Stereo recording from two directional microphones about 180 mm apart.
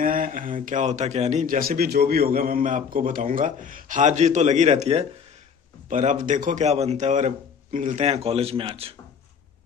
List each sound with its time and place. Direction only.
0.0 s speech: 50° right (ahead or behind); by 8.9 s 35° right (ahead or behind)